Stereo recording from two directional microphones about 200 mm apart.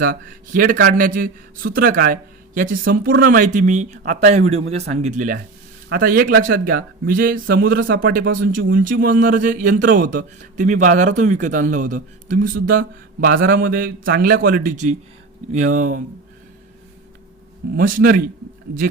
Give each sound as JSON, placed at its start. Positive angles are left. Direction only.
{"t": 0.0, "sound": "a man's voice", "side_deg": -45}
{"t": 8.4, "sound": "a man's voice", "side_deg": -70}
{"t": 8.7, "sound": "a man's voice", "side_deg": -45}
{"t": 17.7, "sound": "a man's voice", "side_deg": -45}